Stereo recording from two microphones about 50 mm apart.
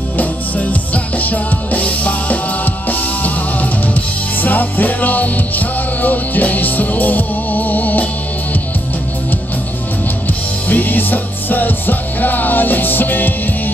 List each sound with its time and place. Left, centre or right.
0.2 s music: left
10.7 s music: left